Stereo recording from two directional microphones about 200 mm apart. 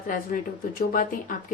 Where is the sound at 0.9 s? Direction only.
45° left (ahead or behind).